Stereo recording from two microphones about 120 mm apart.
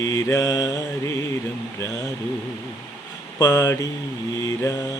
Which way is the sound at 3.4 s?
30° left (ahead or behind).